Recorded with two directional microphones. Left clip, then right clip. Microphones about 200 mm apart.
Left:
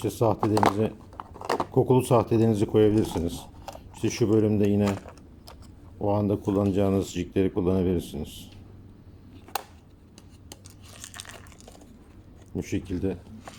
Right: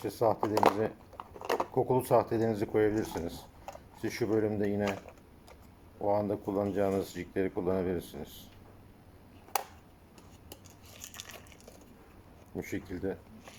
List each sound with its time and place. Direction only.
0.0 s speech: 30° left (ahead or behind)
0.4 s speech: 15° left (ahead or behind)
1.1 s crumpling: 15° left (ahead or behind)
1.7 s speech: 30° left (ahead or behind)
4.9 s typing: 20° left (ahead or behind)
6.0 s speech: 25° left (ahead or behind)
11.0 s a sound: 15° left (ahead or behind)
12.5 s speech: 25° left (ahead or behind)